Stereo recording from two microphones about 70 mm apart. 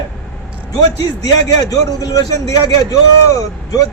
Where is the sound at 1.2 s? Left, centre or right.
Left.